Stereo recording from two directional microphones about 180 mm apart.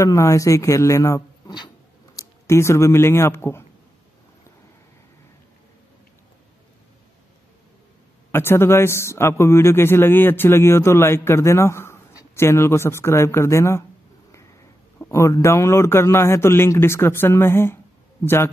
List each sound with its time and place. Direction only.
0.0 s speech: 15° left (ahead or behind)
8.3 s speech: 15° left (ahead or behind)
15.0 s speech: 15° left (ahead or behind)